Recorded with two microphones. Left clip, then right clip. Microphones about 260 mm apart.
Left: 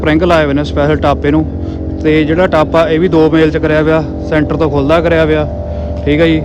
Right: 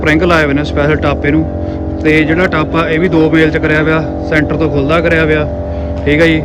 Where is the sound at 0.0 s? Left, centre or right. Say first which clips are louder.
Even; centre.